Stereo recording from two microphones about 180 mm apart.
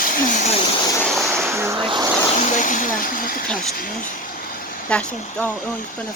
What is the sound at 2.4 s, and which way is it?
Speech, 45° left (ahead or behind).